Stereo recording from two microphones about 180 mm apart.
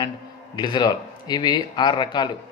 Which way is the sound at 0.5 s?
25° left (ahead or behind).